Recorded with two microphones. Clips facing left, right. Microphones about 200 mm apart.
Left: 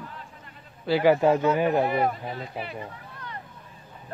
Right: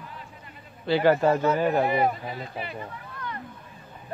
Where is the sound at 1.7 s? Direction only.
Centre (ahead or behind).